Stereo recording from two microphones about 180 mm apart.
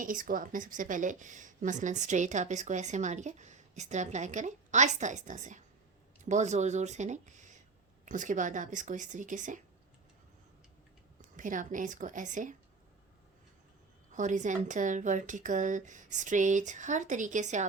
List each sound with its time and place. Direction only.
0.0 s a woman's voice: 50° right (ahead or behind)
11.3 s a woman's voice: 45° right (ahead or behind)
14.1 s a woman's voice: 45° right (ahead or behind)